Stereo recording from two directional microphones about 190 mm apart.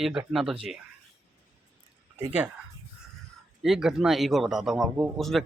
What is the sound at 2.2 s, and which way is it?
Speech, 5° right (ahead or behind).